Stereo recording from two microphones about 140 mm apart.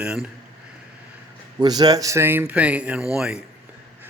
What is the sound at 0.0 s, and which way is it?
Speech, 5° right (ahead or behind).